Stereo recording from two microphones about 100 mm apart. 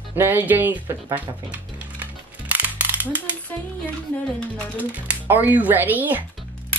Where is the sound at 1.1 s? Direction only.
15° right (ahead or behind).